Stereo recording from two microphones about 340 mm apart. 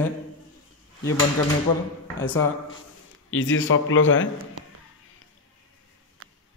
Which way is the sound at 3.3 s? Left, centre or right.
Left.